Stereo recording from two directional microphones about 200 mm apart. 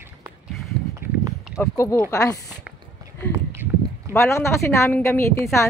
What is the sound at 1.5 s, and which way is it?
Speech, 15° left (ahead or behind).